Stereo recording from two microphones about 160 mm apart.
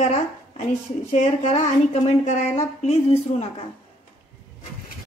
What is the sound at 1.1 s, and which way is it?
A woman's voice, 40° left (ahead or behind).